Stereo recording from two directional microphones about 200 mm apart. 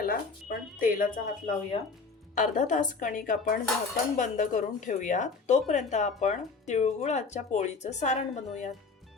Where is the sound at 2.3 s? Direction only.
40° left (ahead or behind).